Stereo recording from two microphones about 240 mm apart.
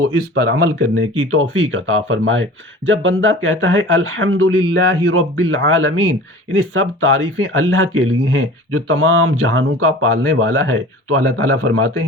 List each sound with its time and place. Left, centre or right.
0.3 s speech: right